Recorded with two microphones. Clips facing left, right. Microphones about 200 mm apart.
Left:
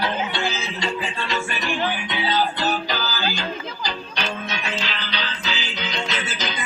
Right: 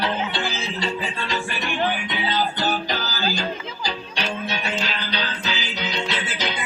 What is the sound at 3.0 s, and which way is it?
Music, 40° right (ahead or behind).